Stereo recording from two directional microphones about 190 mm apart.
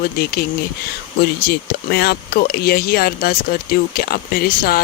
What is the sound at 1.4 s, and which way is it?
Speech, 60° left (ahead or behind).